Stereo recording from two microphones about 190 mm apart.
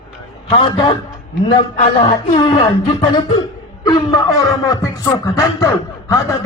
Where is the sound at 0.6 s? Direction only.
25° left (ahead or behind).